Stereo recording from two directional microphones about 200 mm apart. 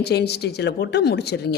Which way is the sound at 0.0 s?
55° left (ahead or behind).